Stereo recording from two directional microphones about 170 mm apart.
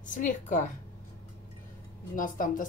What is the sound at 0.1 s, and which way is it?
Speech, 50° left (ahead or behind).